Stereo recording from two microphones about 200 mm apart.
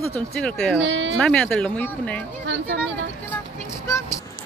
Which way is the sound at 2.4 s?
70° right (ahead or behind).